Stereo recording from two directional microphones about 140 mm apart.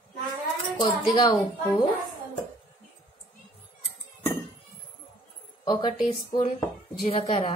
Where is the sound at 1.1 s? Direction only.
30° left (ahead or behind).